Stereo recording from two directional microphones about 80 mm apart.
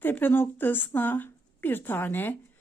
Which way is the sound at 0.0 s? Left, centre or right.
Left.